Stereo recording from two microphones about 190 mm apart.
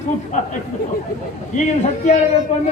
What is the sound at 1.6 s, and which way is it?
Speech, 35° left (ahead or behind).